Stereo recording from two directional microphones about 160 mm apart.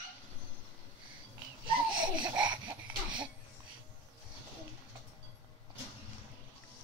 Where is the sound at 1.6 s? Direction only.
30° right (ahead or behind).